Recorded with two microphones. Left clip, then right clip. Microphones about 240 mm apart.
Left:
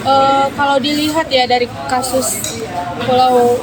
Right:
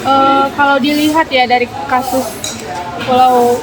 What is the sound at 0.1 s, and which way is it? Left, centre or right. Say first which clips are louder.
Speech: right 1 dB; left.